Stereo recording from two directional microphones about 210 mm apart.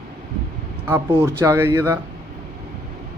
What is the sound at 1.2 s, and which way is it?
Speech, 15° right (ahead or behind).